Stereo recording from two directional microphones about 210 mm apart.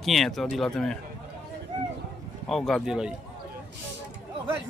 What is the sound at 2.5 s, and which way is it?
Speech, centre (ahead or behind).